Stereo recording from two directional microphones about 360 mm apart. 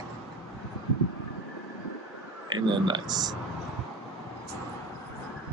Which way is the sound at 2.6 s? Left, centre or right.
Centre.